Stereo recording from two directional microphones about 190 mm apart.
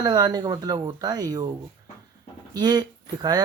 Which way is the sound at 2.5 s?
20° right (ahead or behind).